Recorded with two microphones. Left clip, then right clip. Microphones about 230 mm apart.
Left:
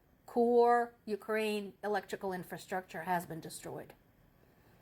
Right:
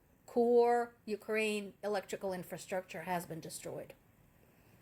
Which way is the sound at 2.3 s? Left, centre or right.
Centre.